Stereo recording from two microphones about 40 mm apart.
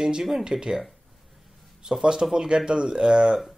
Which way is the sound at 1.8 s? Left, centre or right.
Centre.